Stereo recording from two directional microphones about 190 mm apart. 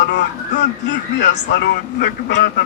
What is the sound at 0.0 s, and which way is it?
Speech, 65° left (ahead or behind).